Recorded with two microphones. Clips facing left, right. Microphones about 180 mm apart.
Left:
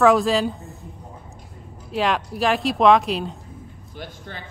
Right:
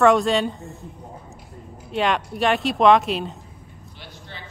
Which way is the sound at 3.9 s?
45° left (ahead or behind).